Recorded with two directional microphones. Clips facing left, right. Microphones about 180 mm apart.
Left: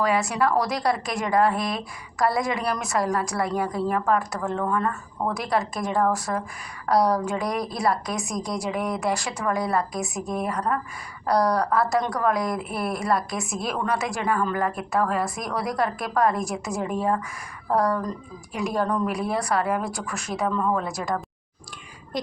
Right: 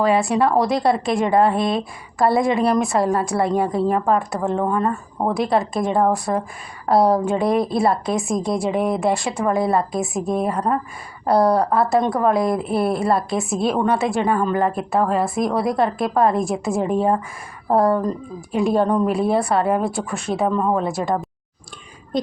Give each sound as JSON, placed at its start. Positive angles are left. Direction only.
{"t": 0.0, "sound": "speech", "side_deg": -30}